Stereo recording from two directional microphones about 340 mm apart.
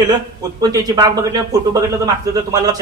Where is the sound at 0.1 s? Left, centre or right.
Centre.